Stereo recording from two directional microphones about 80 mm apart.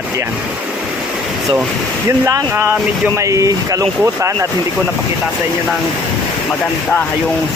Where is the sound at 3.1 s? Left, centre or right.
Right.